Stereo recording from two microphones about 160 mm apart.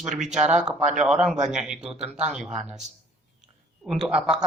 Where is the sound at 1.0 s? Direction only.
Centre (ahead or behind).